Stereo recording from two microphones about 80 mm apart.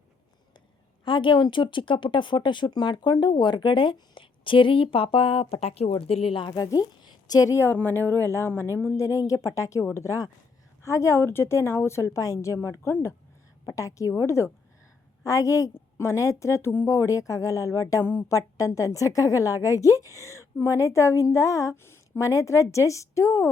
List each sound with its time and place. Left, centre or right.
1.0 s speech: left
6.6 s a woman's voice: left
7.6 s a woman's voice: left